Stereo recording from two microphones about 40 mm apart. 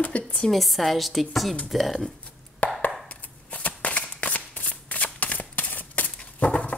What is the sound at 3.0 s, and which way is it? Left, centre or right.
Shuffling cards, left.